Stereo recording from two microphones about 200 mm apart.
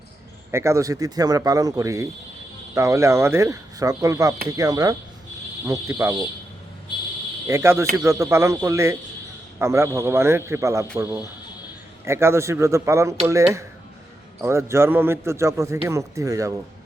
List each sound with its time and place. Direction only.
0.5 s a man's voice: 15° right (ahead or behind)
7.4 s a man's voice: 15° right (ahead or behind)